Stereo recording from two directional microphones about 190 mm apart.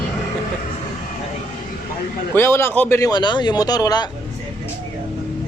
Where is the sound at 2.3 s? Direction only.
15° left (ahead or behind).